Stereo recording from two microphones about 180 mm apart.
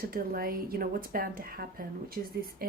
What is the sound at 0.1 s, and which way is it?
Speech, 55° right (ahead or behind).